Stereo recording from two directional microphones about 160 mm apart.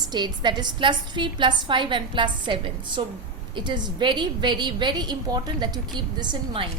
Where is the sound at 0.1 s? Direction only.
25° right (ahead or behind).